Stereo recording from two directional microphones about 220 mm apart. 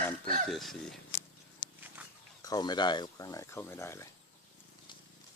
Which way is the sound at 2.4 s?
20° left (ahead or behind).